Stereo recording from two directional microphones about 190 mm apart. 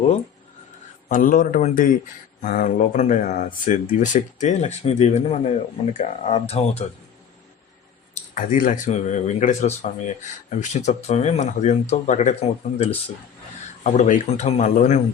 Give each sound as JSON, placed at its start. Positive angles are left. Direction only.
{"t": 1.0, "sound": "a man's voice", "side_deg": 45}
{"t": 8.1, "sound": "speech", "side_deg": 40}
{"t": 13.9, "sound": "speech", "side_deg": 40}